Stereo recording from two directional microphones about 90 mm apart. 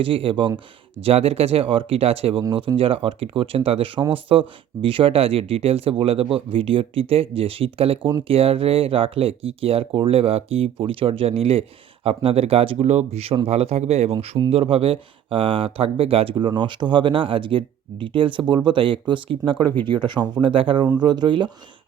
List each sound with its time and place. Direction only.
0.0 s speech: 80° right
1.0 s speech: 90° right
2.5 s speech: 70° right (ahead or behind); by 12.7 s 90° right
13.2 s speech: 70° right (ahead or behind); by 16.3 s 90° right
16.3 s speech: 60° right (ahead or behind)
19.6 s speech: 20° left (ahead or behind)
20.0 s speech: 60° right (ahead or behind)
20.4 s speech: 75° right (ahead or behind)
21.0 s speech: 55° right (ahead or behind)